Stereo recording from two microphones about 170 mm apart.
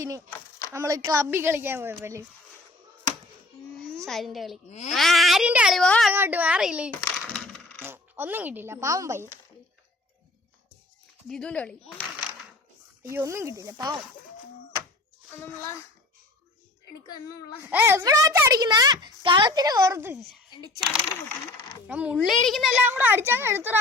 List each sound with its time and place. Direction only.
0.7 s a child's voice: 20° right (ahead or behind)
4.0 s speech: centre (ahead or behind)
4.7 s speech: 40° left (ahead or behind)
4.9 s speech: centre (ahead or behind)
6.1 s a child's voice: 10° right (ahead or behind)
7.0 s coin: 5° left (ahead or behind)
7.8 s speech: 15° right (ahead or behind)
11.3 s speech: 5° left (ahead or behind)
13.1 s a child's voice: 15° right (ahead or behind)
15.3 s speech: 15° left (ahead or behind)
17.7 s a child's voice: 10° right (ahead or behind)
21.8 s a child's voice: 5° right (ahead or behind)